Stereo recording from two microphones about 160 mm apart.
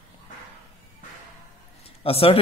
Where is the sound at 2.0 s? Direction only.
35° left (ahead or behind).